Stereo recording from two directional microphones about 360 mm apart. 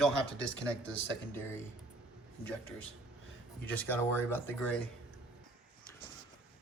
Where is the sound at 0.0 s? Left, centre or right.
Centre.